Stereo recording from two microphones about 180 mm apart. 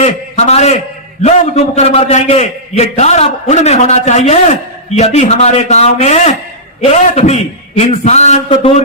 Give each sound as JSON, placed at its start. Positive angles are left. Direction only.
{"t": 0.0, "sound": "a man's voice", "side_deg": 35}